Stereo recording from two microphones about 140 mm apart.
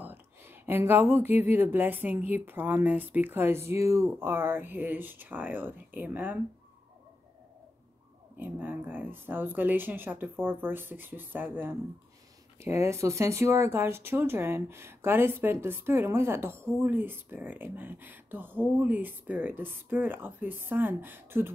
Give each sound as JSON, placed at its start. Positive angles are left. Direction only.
{"t": 0.0, "sound": "speech", "side_deg": -15}
{"t": 8.4, "sound": "speech", "side_deg": -15}